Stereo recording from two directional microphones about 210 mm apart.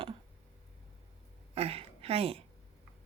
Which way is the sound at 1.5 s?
30° right (ahead or behind).